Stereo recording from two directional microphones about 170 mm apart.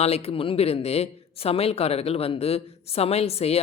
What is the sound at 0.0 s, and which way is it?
Speech, 35° left (ahead or behind).